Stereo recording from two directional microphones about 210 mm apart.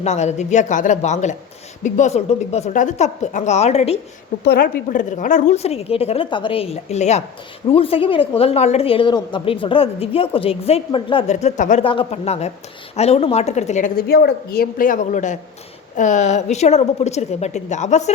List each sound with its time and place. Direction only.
0.0 s a woman's voice: 30° left (ahead or behind)
4.4 s a woman's voice: 45° left (ahead or behind)